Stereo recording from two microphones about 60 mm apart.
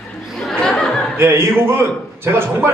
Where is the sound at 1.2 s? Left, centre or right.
Right.